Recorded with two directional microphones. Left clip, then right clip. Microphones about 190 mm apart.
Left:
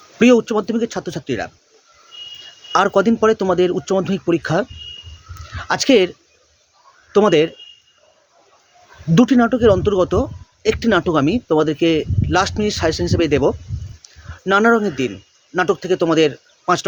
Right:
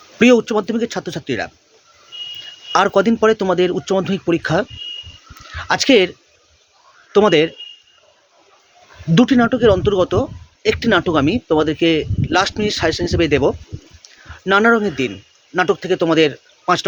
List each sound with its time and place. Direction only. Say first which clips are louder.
0.2 s speech: right 1 dB; 5° left (ahead or behind)
2.7 s a man's voice: right 1 dB; 5° left (ahead or behind)
9.1 s a man's voice: even; 10° left (ahead or behind)